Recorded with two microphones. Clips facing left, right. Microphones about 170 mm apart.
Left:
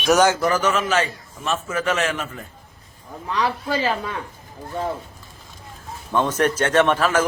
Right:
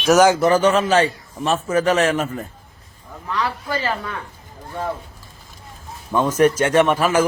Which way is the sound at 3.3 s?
15° left (ahead or behind).